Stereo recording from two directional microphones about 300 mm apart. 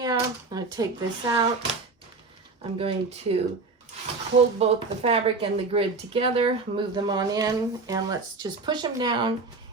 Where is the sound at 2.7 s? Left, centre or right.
Centre.